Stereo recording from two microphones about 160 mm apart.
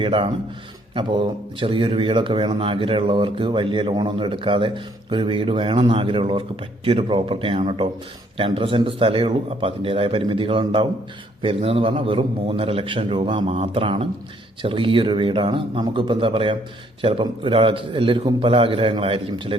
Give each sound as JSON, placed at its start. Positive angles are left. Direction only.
{"t": 0.0, "sound": "speech", "side_deg": -35}